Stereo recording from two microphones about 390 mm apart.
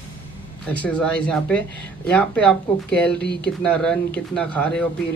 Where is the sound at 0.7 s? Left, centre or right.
Centre.